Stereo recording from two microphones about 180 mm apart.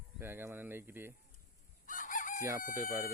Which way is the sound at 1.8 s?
45° left (ahead or behind).